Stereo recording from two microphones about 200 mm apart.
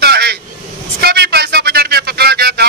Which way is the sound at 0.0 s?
55° right (ahead or behind).